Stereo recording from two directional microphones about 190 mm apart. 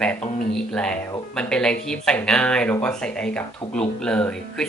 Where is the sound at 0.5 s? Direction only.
5° left (ahead or behind).